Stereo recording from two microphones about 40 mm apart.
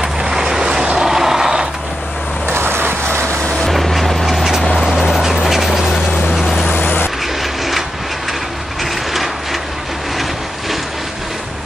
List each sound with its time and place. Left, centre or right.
0.0 s vehicle: centre
2.5 s vehicle: right
3.6 s vehicle: centre
4.8 s duck: centre
6.3 s vehicle: centre
6.7 s vehicle: left
9.1 s ratchet: centre